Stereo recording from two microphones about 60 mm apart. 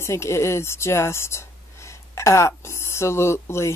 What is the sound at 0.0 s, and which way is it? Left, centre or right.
Speech, left.